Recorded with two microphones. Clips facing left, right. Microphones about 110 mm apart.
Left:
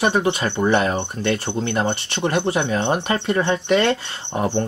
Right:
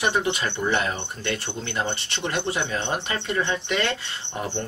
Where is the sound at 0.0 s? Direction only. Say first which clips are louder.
Left 5 dB; 50° left (ahead or behind).